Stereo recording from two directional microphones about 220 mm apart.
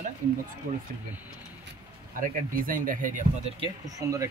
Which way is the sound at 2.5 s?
40° right (ahead or behind).